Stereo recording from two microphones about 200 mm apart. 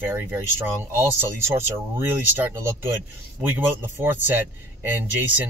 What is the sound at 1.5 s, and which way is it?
Speech, 10° right (ahead or behind).